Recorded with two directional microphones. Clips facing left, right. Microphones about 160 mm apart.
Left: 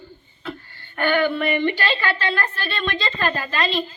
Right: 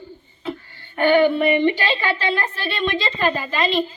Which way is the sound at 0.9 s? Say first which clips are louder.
Right 5 dB; 20° right (ahead or behind).